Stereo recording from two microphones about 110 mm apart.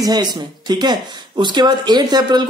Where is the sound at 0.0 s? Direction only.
40° right (ahead or behind).